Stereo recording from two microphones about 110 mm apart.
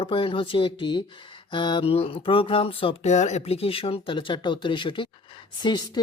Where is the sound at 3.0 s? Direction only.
90° left.